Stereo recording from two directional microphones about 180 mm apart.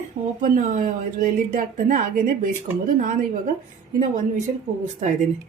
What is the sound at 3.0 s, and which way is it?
Speech, 50° right (ahead or behind).